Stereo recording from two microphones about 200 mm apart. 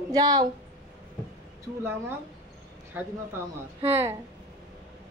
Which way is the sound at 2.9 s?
10° right (ahead or behind).